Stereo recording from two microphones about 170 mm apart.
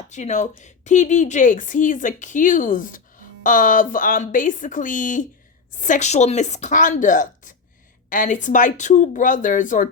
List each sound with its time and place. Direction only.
0.1 s speech: 45° left (ahead or behind)